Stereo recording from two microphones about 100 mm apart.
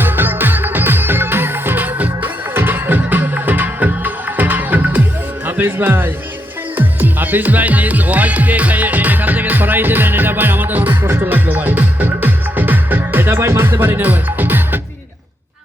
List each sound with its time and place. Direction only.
0.0 s music: 20° right (ahead or behind)
6.7 s speech: 20° right (ahead or behind)